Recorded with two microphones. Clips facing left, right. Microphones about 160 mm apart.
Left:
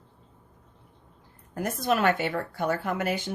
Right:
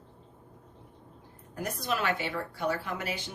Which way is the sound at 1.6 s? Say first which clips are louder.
Left 6 dB; 55° left (ahead or behind).